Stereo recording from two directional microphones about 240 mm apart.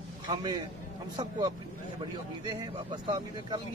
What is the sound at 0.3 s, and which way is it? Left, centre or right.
Speech, centre.